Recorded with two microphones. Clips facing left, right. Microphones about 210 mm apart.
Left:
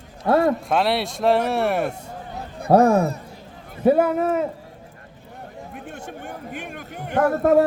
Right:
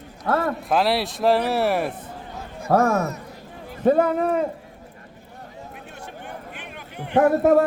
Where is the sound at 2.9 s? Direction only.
30° left (ahead or behind).